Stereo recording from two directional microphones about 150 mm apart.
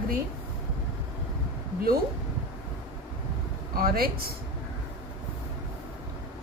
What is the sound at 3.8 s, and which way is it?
Speech, 80° right.